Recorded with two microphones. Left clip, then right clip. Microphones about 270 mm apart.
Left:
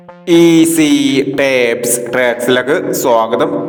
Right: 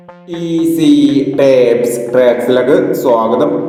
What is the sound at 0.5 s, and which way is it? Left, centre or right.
Speech, left.